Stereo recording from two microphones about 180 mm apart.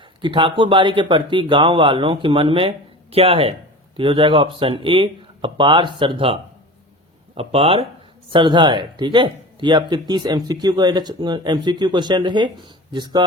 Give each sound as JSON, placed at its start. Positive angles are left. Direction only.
{"t": 0.2, "sound": "speech", "side_deg": -30}